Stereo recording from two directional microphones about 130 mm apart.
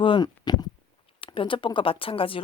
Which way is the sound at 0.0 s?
35° left (ahead or behind).